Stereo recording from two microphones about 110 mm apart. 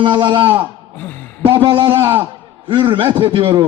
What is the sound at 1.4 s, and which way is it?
Speech, 50° right (ahead or behind).